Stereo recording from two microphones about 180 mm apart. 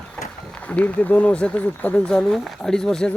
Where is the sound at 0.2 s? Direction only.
5° left (ahead or behind).